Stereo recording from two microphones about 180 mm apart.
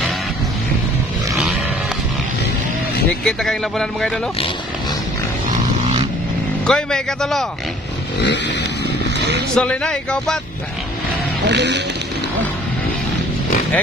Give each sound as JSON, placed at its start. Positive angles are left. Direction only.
{"t": 3.1, "sound": "speech", "side_deg": 5}
{"t": 6.7, "sound": "speech", "side_deg": 5}
{"t": 9.6, "sound": "speech", "side_deg": 5}
{"t": 11.4, "sound": "speech", "side_deg": -70}